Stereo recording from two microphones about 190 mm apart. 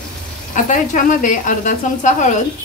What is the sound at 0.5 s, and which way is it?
A woman's voice, 40° left (ahead or behind).